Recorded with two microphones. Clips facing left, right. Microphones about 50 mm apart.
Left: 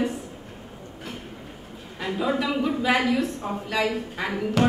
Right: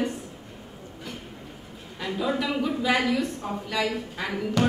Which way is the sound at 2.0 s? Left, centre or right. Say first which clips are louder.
Left 2 dB; centre.